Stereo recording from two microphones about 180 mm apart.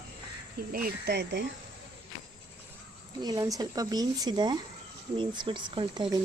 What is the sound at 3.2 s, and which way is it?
Speech, 20° right (ahead or behind).